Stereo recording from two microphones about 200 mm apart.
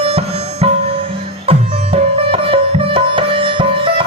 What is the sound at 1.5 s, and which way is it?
Sitar, 30° right (ahead or behind).